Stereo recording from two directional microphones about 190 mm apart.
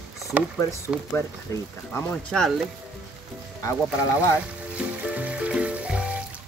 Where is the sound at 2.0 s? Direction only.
10° left (ahead or behind).